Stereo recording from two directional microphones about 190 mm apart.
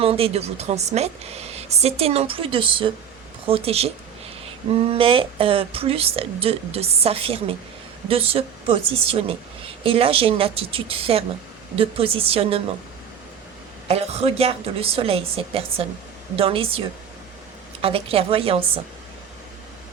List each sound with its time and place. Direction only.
0.0 s a woman's voice: 30° right (ahead or behind)
13.8 s a woman's voice: 35° right (ahead or behind)
17.8 s a woman's voice: 30° right (ahead or behind)